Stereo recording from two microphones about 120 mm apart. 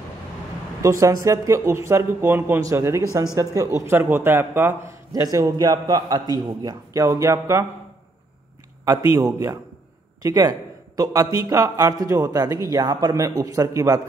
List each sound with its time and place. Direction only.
0.8 s speech: 25° right (ahead or behind)
8.8 s a man's voice: 30° right (ahead or behind)